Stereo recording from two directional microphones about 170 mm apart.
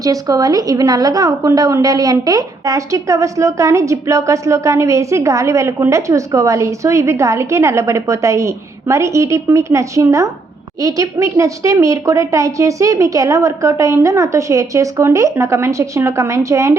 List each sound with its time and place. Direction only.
0.0 s a woman's voice: 20° right (ahead or behind)